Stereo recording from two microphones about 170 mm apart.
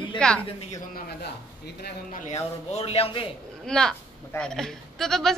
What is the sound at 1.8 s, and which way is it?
A man's voice, 50° left (ahead or behind).